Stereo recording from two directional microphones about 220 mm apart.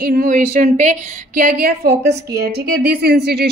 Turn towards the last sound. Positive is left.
turn(degrees=-45)  # may be behind; listen again after turning